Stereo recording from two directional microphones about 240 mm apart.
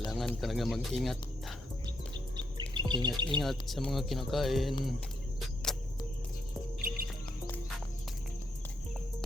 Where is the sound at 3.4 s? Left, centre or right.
Centre.